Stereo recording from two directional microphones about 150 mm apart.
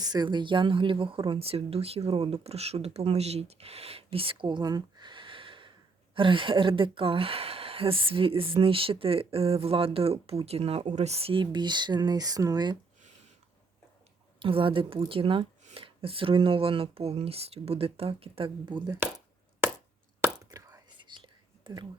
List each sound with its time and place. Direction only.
0.0 s speech: 25° right (ahead or behind)
14.3 s speech: 35° right (ahead or behind)
20.2 s whispering: 20° right (ahead or behind)